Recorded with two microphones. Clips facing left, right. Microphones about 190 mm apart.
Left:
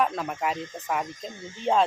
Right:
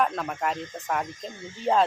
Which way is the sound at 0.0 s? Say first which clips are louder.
Even; centre (ahead or behind).